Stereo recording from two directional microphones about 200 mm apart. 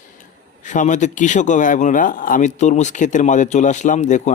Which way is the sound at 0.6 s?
40° left (ahead or behind).